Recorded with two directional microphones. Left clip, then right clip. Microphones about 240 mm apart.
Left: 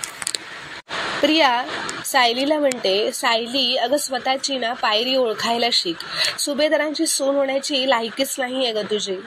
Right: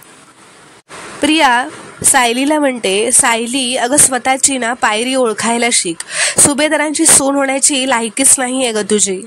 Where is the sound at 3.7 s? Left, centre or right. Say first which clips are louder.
Right 6 dB; right.